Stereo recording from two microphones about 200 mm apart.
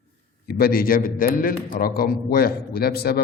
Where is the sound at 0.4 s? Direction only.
50° left (ahead or behind).